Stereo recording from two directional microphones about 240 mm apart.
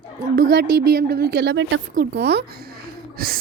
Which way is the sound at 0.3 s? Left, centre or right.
Right.